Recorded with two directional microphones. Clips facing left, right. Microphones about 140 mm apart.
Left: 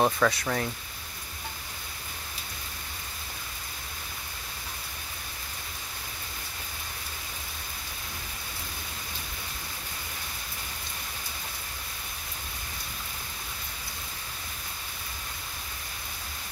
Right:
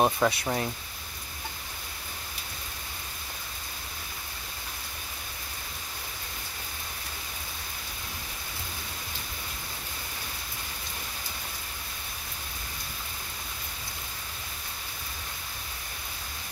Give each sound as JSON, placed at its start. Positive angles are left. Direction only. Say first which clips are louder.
{"t": 0.0, "sound": "speech", "louder": "even", "side_deg": -25}